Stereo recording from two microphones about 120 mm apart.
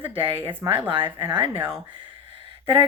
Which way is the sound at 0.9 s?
45° right (ahead or behind).